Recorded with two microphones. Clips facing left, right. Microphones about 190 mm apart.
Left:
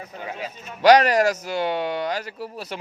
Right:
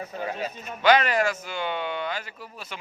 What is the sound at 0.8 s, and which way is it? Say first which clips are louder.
Speech: left 5 dB; 40° left (ahead or behind).